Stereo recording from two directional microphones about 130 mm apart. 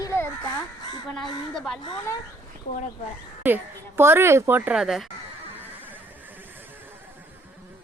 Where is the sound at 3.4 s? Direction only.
15° right (ahead or behind).